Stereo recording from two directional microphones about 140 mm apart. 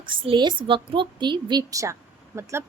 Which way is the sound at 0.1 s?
35° right (ahead or behind).